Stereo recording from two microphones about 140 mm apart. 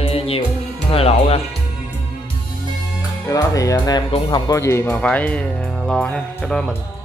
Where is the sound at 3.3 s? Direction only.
25° left (ahead or behind).